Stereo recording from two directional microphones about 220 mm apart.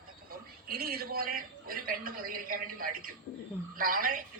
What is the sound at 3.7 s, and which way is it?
Speech, 40° right (ahead or behind).